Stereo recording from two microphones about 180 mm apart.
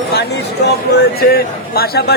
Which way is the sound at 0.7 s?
65° left (ahead or behind).